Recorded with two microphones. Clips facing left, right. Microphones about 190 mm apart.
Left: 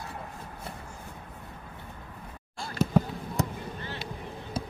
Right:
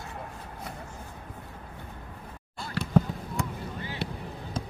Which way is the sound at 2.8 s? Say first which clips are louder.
Left 6 dB; 70° right (ahead or behind).